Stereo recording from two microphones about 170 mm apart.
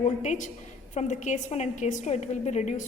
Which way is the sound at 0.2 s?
45° left (ahead or behind).